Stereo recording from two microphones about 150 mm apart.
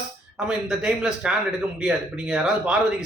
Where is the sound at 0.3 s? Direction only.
5° right (ahead or behind).